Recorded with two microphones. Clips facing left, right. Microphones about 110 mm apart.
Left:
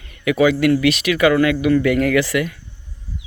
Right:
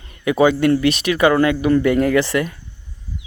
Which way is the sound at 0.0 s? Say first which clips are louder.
Right 1 dB; 30° right (ahead or behind).